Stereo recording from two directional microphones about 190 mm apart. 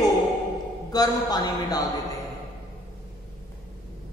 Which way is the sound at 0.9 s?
20° left (ahead or behind).